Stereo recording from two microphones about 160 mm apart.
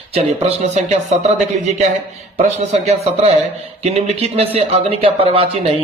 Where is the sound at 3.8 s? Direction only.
40° right (ahead or behind).